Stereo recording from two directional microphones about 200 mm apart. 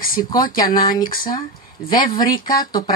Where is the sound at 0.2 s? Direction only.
20° left (ahead or behind).